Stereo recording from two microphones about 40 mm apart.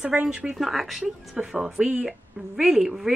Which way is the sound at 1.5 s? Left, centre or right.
Centre.